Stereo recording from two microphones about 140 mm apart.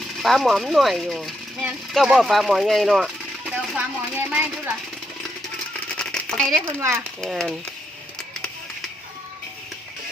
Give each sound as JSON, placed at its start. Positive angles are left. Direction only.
{"t": 0.2, "sound": "speech", "side_deg": 0}
{"t": 3.5, "sound": "speech", "side_deg": -15}
{"t": 5.9, "sound": "typewriter", "side_deg": 5}
{"t": 6.7, "sound": "speech", "side_deg": -20}
{"t": 7.2, "sound": "speech", "side_deg": 5}